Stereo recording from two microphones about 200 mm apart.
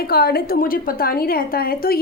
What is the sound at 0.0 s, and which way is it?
A woman's voice, 50° left (ahead or behind).